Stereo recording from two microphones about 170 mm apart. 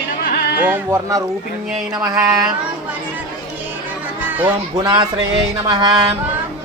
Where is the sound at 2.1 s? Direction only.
5° right (ahead or behind).